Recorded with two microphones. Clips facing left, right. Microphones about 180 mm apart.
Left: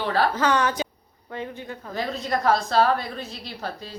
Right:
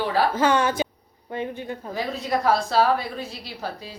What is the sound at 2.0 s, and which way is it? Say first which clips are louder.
A woman's voice: even; 5° right (ahead or behind).